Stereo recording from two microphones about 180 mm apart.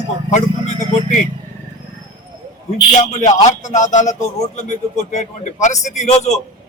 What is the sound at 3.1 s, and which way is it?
A man's voice, 40° left (ahead or behind).